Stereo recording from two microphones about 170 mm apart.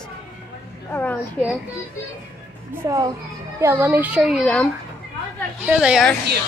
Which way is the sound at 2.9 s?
20° right (ahead or behind).